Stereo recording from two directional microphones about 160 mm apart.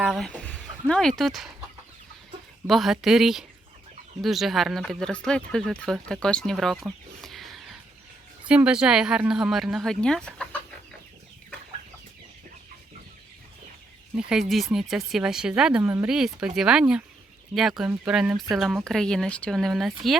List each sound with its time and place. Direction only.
0.0 s speech: 5° right (ahead or behind)
0.3 s speech: 5° left (ahead or behind)
2.6 s speech: centre (ahead or behind)
7.2 s a sound: centre (ahead or behind)
8.4 s speech: 5° right (ahead or behind)
14.2 s speech: 5° right (ahead or behind)